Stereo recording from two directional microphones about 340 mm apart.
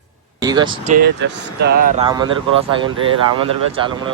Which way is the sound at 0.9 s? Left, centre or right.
Right.